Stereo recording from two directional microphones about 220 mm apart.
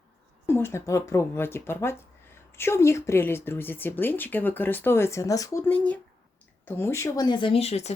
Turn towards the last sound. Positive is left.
turn(degrees=30)  # may be behind; listen again after turning